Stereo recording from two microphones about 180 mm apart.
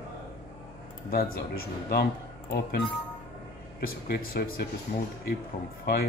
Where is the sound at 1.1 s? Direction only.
55° left (ahead or behind).